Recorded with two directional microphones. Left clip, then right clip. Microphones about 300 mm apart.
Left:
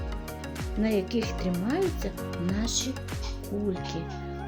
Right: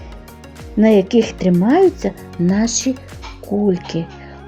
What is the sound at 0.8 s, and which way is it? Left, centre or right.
Speech, left.